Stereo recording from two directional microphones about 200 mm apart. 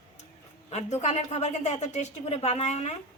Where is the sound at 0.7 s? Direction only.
35° left (ahead or behind).